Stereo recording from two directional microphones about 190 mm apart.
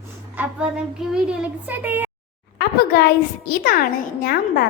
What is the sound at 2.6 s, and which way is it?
A child's voice, 55° left (ahead or behind).